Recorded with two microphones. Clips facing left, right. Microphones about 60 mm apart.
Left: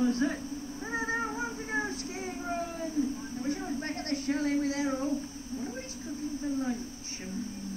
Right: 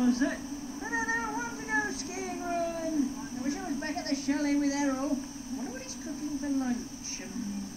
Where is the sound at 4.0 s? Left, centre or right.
Left.